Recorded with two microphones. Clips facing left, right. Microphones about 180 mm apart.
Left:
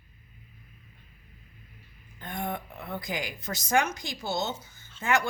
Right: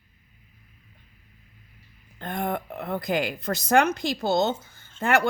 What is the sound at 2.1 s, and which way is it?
Speech, 60° right (ahead or behind).